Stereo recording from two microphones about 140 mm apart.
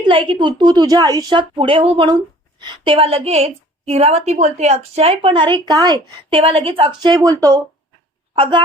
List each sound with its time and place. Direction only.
0.0 s a woman's voice: 40° right (ahead or behind)
5.6 s a woman's voice: 25° right (ahead or behind)
6.3 s a woman's voice: 40° right (ahead or behind)